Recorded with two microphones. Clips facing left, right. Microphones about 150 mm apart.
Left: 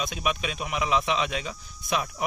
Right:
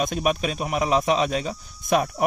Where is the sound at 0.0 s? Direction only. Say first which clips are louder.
Right 6 dB; 45° right (ahead or behind).